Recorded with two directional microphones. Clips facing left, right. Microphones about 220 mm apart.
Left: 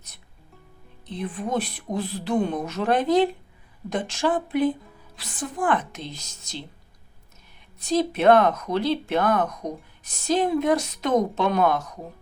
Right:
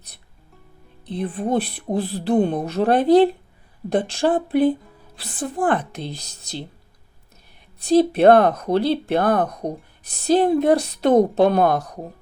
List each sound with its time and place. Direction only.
1.0 s speech: 35° right (ahead or behind)
7.8 s speech: 35° right (ahead or behind)